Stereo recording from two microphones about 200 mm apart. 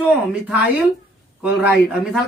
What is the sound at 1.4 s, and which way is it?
Speech, 5° right (ahead or behind).